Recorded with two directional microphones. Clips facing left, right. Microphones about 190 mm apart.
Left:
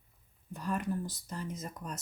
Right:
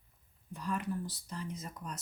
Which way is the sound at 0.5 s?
45° left (ahead or behind).